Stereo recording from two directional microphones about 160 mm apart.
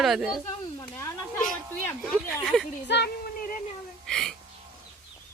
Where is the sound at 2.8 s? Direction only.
90° left.